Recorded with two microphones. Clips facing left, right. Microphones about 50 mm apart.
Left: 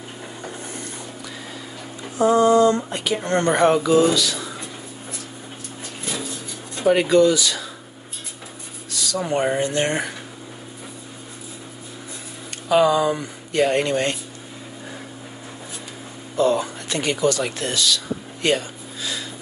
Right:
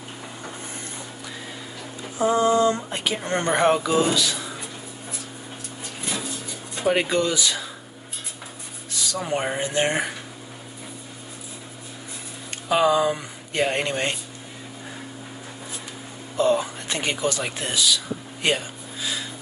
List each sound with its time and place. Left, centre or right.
2.1 s a sound: left
2.6 s speech: right
6.8 s speech: centre
8.9 s a sound: right
9.2 s speech: centre
12.6 s speech: centre
16.3 s speech: right